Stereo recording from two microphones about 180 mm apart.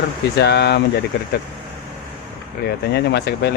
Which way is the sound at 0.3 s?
65° left (ahead or behind).